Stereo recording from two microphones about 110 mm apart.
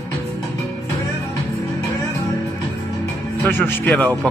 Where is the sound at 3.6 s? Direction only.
15° left (ahead or behind).